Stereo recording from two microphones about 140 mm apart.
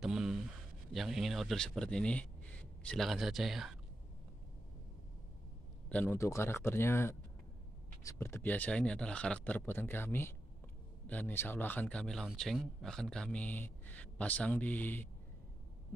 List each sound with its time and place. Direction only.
0.0 s a sound: centre (ahead or behind)
0.9 s speech: centre (ahead or behind)
5.9 s a man's voice: 10° left (ahead or behind)